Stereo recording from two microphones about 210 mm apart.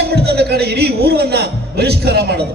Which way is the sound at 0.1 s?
50° right (ahead or behind).